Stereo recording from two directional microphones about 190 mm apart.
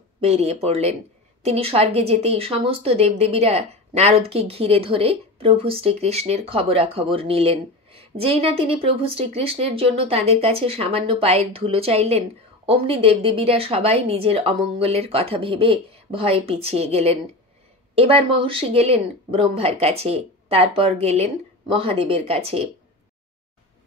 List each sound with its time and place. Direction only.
0.2 s a woman's voice: 35° right (ahead or behind)